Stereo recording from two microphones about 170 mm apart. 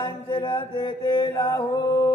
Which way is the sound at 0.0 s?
30° left (ahead or behind).